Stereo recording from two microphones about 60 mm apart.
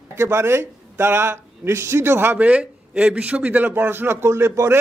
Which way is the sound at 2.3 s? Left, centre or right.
Right.